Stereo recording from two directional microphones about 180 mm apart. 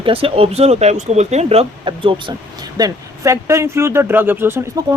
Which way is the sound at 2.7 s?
20° right (ahead or behind).